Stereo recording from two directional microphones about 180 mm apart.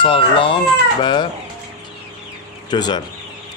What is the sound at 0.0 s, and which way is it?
A man's voice, 30° left (ahead or behind).